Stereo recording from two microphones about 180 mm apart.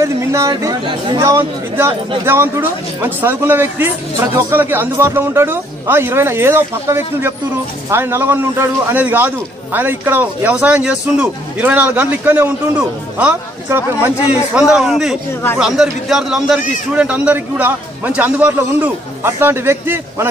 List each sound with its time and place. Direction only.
0.0 s a man's voice: 15° right (ahead or behind)